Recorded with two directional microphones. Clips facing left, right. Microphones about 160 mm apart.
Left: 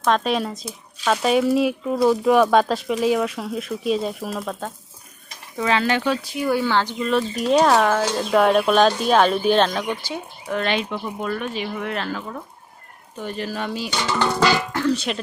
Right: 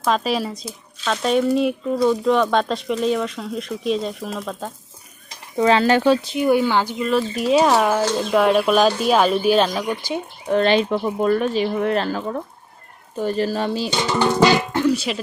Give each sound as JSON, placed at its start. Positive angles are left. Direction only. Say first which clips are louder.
{"t": 0.0, "sound": "speech", "louder": "even", "side_deg": 0}
{"t": 5.5, "sound": "speech", "louder": "right 5 dB", "side_deg": -35}
{"t": 10.5, "sound": "speech", "louder": "right 7 dB", "side_deg": -30}
{"t": 14.0, "sound": "music", "louder": "right 3 dB", "side_deg": -20}
{"t": 14.9, "sound": "speech", "louder": "right 2 dB", "side_deg": -5}